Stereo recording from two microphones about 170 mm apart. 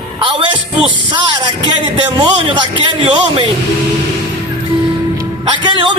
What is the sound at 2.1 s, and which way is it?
Speech, 30° right (ahead or behind).